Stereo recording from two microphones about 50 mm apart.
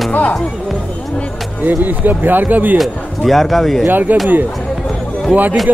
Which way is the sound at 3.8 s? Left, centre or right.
Right.